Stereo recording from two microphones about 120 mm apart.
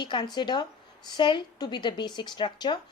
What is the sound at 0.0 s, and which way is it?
A woman's voice, 40° left (ahead or behind).